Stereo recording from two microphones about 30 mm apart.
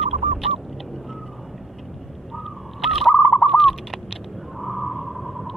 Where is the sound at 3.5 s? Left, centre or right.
Centre.